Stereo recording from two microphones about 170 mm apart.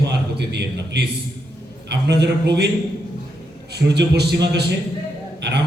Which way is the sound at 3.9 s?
75° right (ahead or behind).